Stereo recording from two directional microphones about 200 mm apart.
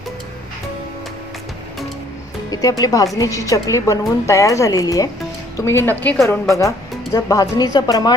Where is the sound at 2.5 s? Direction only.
20° left (ahead or behind).